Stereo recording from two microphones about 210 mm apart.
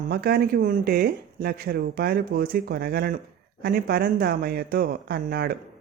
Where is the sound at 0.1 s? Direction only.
45° right (ahead or behind).